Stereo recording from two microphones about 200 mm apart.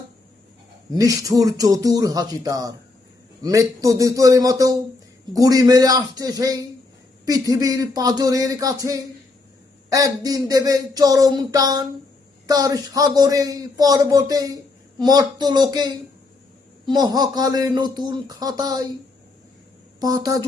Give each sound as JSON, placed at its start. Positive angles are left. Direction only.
{"t": 0.9, "sound": "speech", "side_deg": -15}
{"t": 20.0, "sound": "speech", "side_deg": -20}